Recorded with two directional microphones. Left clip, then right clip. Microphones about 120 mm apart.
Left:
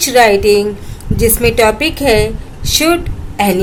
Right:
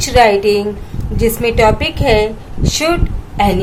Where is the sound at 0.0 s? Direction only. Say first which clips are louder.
Left 1 dB; 35° left (ahead or behind).